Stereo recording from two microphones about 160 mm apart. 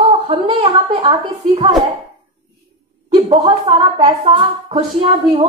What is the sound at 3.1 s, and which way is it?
Speech, 30° right (ahead or behind).